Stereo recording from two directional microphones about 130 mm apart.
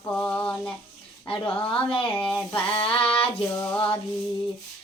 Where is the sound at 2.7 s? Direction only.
45° left (ahead or behind).